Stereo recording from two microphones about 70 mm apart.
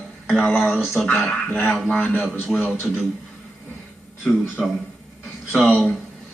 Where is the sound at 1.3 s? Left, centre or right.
Left.